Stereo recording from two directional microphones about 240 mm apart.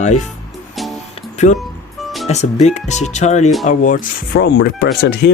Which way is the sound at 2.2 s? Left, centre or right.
Left.